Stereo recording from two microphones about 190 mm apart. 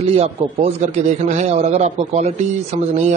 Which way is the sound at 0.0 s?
35° right (ahead or behind).